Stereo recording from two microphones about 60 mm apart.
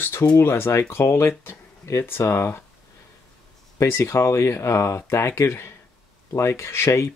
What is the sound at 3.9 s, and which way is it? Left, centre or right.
Speech, left.